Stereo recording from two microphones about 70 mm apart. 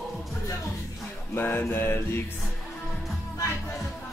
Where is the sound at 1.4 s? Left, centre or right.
Left.